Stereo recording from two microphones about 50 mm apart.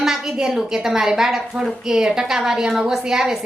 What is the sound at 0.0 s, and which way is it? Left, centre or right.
A woman's voice, centre.